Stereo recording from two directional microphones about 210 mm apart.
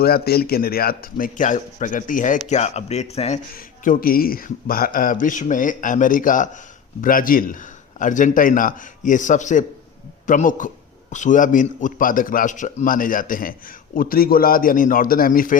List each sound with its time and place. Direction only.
0.0 s a man's voice: 45° left (ahead or behind); by 3.4 s 30° left (ahead or behind)
3.5 s a man's voice: 45° left (ahead or behind)